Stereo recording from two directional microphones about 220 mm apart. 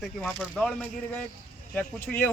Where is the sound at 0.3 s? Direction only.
Centre (ahead or behind).